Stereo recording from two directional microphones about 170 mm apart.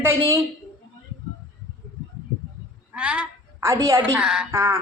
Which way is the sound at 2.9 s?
5° right (ahead or behind).